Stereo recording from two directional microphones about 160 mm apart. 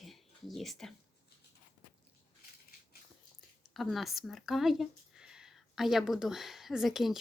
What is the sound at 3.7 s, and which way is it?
Speech, centre (ahead or behind).